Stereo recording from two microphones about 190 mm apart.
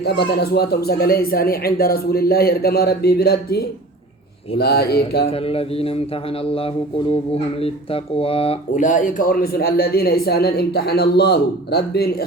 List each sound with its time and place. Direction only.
0.0 s speech: 55° left (ahead or behind)
5.3 s speech: 30° left (ahead or behind)
8.7 s speech: 45° left (ahead or behind)